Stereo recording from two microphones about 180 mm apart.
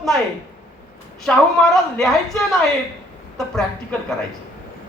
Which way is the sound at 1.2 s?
Centre (ahead or behind).